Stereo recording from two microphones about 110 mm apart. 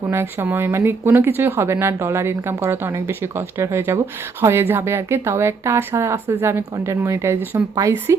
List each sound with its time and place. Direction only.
0.1 s speech: 20° right (ahead or behind)